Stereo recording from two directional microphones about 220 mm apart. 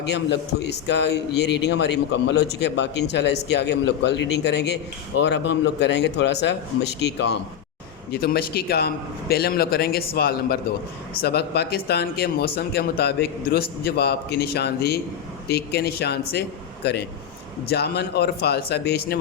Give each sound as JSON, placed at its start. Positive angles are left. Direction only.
{"t": 0.0, "sound": "a man's voice", "side_deg": 50}